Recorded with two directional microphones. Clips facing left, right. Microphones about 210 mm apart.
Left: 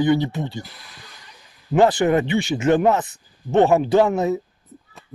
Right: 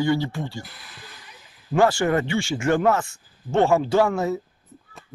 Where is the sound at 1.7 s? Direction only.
20° left (ahead or behind).